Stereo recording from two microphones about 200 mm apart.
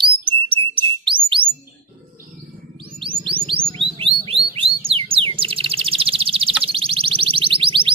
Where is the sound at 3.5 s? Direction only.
25° right (ahead or behind).